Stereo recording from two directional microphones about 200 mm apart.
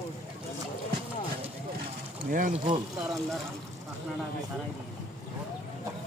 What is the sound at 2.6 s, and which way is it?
Speech, 25° right (ahead or behind).